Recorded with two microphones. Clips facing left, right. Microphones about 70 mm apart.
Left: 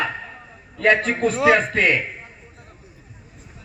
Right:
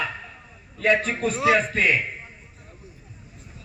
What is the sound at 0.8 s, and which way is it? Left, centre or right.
A man's voice, left.